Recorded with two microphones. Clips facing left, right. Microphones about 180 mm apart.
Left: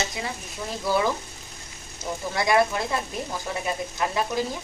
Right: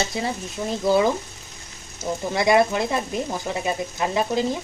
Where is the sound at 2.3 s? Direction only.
20° right (ahead or behind).